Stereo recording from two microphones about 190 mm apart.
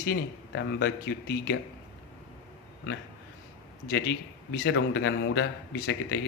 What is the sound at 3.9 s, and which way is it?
Speech, 60° left (ahead or behind).